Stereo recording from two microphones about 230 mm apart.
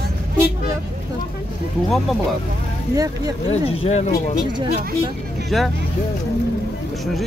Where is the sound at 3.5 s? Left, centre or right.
Left.